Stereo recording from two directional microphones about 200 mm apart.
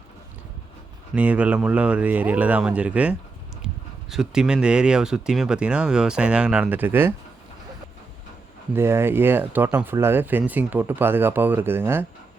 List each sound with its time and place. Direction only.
1.1 s speech: 5° right (ahead or behind)
8.7 s speech: 10° right (ahead or behind)